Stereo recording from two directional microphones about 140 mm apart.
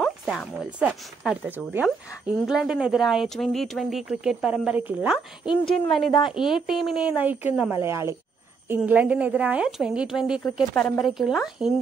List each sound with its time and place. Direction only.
0.0 s music: centre (ahead or behind)
0.7 s a woman's voice: 5° right (ahead or behind)